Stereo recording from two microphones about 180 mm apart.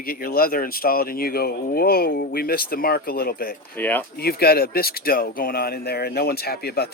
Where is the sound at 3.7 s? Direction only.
10° left (ahead or behind).